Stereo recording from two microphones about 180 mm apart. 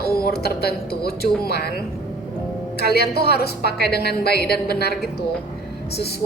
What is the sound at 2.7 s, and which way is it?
A woman's voice, 65° left (ahead or behind).